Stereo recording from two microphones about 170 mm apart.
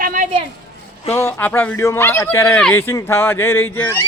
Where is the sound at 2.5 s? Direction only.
5° left (ahead or behind).